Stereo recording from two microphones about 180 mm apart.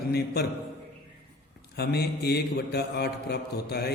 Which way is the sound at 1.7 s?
65° left (ahead or behind).